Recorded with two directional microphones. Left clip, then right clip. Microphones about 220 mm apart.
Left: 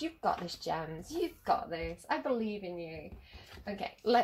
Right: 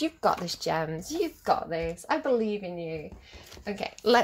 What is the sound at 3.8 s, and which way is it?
Speech, 40° right (ahead or behind).